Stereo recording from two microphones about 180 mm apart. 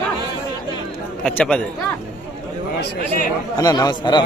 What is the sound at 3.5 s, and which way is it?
Speech, 20° left (ahead or behind).